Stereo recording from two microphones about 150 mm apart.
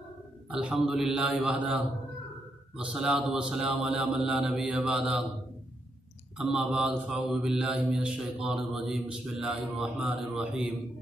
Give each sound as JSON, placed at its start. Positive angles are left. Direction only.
{"t": 0.5, "sound": "a man's voice", "side_deg": -5}
{"t": 2.8, "sound": "a man's voice", "side_deg": -5}
{"t": 6.3, "sound": "a man's voice", "side_deg": 0}